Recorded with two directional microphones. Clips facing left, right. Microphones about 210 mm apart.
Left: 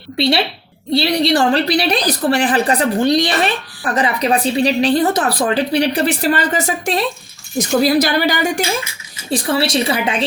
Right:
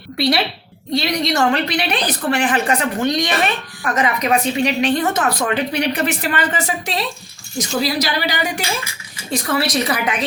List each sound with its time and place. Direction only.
0.2 s a woman's voice: 25° left (ahead or behind); by 8.6 s 50° left (ahead or behind)
9.3 s a woman's voice: 30° left (ahead or behind)